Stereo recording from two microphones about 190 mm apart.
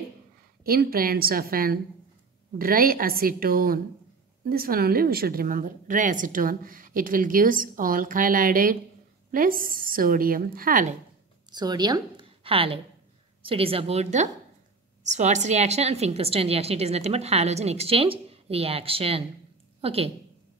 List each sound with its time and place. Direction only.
0.7 s a woman's voice: 50° right (ahead or behind)
11.5 s a woman's voice: 20° right (ahead or behind)